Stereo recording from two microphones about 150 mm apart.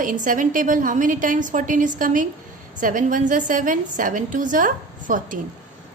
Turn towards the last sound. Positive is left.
turn(degrees=-60)  # may be behind; listen again after turning